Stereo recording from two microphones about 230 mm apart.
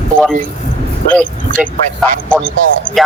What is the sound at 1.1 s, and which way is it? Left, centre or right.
Speech, centre.